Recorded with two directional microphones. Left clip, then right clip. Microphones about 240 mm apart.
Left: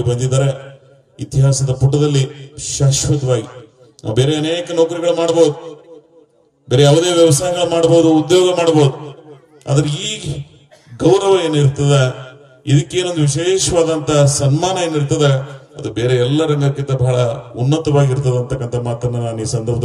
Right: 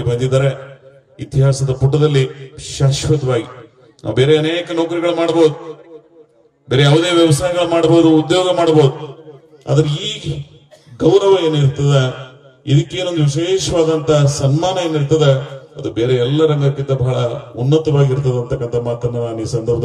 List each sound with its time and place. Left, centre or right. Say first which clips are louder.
0.0 s a man's voice: right 2 dB; left
6.7 s a man's voice: left 1 dB; left